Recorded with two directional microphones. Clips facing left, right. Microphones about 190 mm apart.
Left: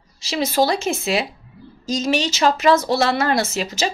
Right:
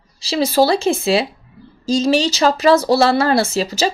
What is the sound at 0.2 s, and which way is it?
Speech, 35° right (ahead or behind).